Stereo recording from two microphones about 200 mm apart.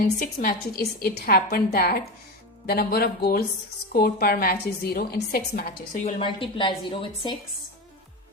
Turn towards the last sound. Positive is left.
turn(degrees=25)  # may be behind; listen again after turning